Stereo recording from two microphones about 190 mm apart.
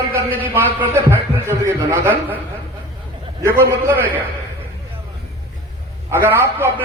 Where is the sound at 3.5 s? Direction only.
10° right (ahead or behind).